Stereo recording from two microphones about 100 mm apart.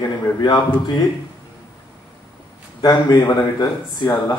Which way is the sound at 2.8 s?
45° left (ahead or behind).